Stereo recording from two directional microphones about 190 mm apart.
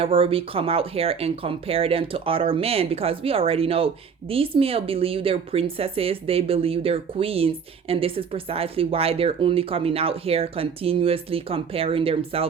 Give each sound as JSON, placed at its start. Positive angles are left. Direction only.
{"t": 0.0, "sound": "speech", "side_deg": -30}